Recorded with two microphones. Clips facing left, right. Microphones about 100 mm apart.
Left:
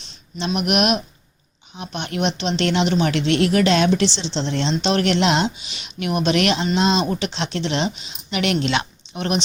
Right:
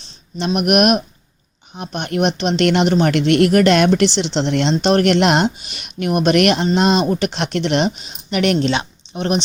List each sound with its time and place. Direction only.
0.3 s speech: 50° right (ahead or behind); by 4.7 s 65° right (ahead or behind)
4.7 s speech: 45° right (ahead or behind)
8.5 s speech: 30° right (ahead or behind)